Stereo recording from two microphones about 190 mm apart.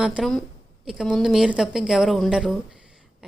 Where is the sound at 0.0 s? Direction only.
Centre (ahead or behind).